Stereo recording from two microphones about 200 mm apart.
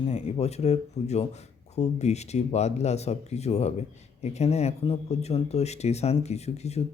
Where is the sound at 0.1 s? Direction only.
30° left (ahead or behind).